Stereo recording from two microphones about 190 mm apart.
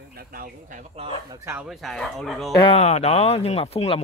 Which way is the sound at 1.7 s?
Centre (ahead or behind).